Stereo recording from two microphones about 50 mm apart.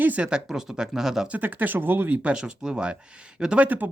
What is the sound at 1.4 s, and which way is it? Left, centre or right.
Speech, right.